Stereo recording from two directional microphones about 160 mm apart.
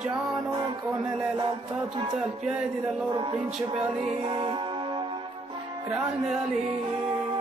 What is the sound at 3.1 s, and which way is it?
Speech, 30° right (ahead or behind).